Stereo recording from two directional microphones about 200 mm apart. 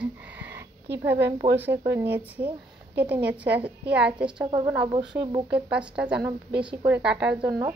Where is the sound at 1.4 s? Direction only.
20° right (ahead or behind).